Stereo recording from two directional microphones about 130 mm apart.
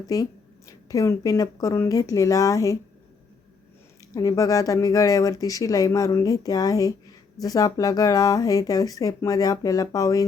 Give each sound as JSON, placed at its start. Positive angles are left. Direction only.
{"t": 0.1, "sound": "speech", "side_deg": 25}
{"t": 4.1, "sound": "speech", "side_deg": 25}